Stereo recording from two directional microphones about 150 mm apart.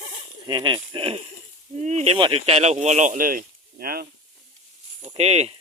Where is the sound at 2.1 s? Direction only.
35° right (ahead or behind); by 4.1 s 80° right.